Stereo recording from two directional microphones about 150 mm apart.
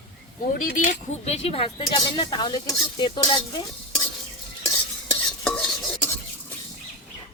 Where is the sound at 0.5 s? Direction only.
65° left (ahead or behind).